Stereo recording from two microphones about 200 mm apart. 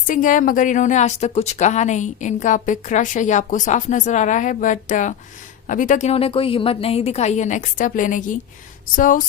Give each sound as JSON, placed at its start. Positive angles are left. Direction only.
{"t": 0.1, "sound": "a woman's voice", "side_deg": 40}